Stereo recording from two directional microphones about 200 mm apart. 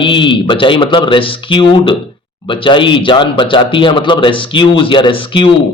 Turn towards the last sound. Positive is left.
turn(degrees=25)  # may be behind; listen again after turning